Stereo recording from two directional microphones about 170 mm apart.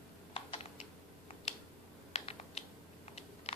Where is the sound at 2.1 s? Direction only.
40° left (ahead or behind).